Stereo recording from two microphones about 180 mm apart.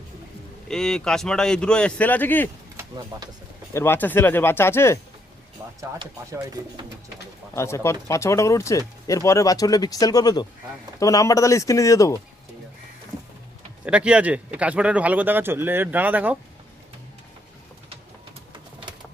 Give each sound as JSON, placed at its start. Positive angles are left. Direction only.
{"t": 0.7, "sound": "speech", "side_deg": 5}
{"t": 2.9, "sound": "speech", "side_deg": -20}
{"t": 3.8, "sound": "speech", "side_deg": 10}
{"t": 6.0, "sound": "speech", "side_deg": -25}
{"t": 7.5, "sound": "speech", "side_deg": 15}
{"t": 13.8, "sound": "speech", "side_deg": -5}